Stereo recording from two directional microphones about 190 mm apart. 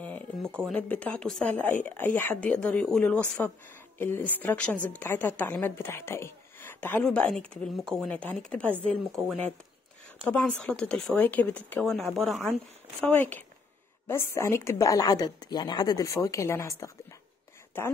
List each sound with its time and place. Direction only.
0.0 s a sound: 10° left (ahead or behind)
0.7 s speech: 10° left (ahead or behind)
10.2 s speech: 5° left (ahead or behind)
17.8 s speech: 10° left (ahead or behind)